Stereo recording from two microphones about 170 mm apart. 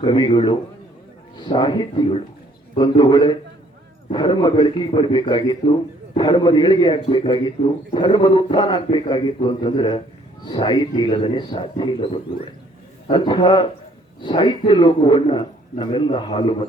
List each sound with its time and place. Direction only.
0.0 s a man's voice: 30° left (ahead or behind)